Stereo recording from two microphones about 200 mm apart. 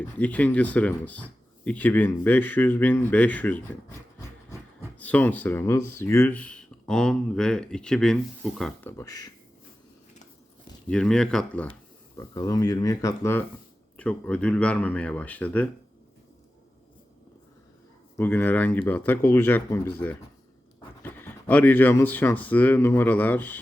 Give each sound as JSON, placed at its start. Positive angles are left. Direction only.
{"t": 0.2, "sound": "speech", "side_deg": 5}
{"t": 10.8, "sound": "speech", "side_deg": 5}
{"t": 12.1, "sound": "speech", "side_deg": 15}
{"t": 18.2, "sound": "speech", "side_deg": 10}